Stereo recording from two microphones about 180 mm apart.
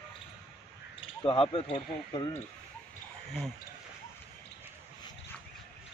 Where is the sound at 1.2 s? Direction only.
30° left (ahead or behind).